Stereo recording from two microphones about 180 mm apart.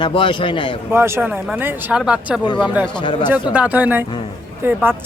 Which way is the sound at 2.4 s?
25° left (ahead or behind).